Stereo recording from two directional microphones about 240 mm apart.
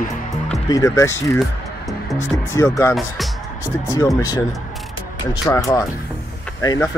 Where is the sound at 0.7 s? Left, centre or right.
Centre.